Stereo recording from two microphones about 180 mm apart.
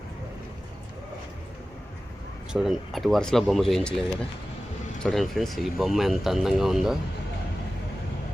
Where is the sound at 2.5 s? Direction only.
Centre (ahead or behind).